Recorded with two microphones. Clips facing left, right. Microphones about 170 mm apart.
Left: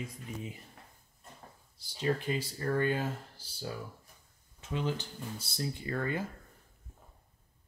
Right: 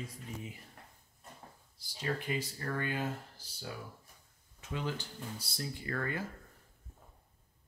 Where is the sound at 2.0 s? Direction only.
30° left (ahead or behind).